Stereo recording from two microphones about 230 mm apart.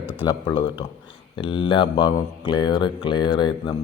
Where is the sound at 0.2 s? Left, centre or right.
Centre.